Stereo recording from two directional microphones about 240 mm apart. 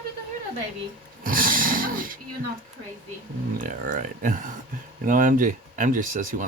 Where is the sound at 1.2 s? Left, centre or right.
Right.